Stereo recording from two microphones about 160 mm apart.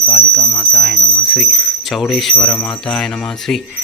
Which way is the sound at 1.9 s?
Centre (ahead or behind).